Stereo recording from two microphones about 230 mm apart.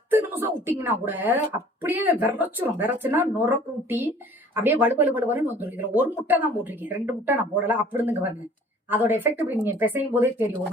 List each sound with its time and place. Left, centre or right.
0.1 s speech: centre